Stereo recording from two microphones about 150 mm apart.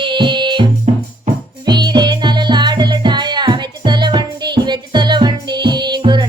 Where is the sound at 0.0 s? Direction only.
30° right (ahead or behind).